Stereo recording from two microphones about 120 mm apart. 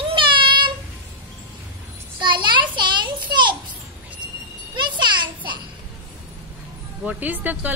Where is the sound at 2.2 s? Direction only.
40° right (ahead or behind).